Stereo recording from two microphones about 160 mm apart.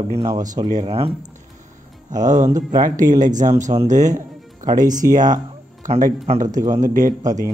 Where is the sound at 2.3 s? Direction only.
50° right (ahead or behind).